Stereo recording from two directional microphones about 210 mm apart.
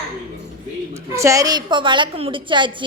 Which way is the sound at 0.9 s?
15° right (ahead or behind).